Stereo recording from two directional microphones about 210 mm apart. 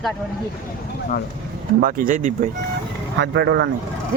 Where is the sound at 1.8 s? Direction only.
40° right (ahead or behind).